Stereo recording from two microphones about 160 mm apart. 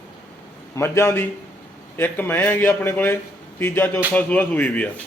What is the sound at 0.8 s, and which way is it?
A man's voice, 15° left (ahead or behind).